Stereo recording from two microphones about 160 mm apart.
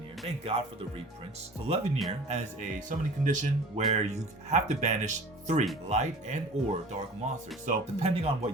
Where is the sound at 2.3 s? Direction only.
50° right (ahead or behind).